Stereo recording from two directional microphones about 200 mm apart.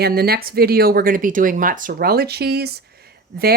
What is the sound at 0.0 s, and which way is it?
Speech, 50° right (ahead or behind).